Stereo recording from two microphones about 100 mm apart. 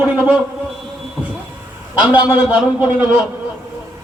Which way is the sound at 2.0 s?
15° right (ahead or behind).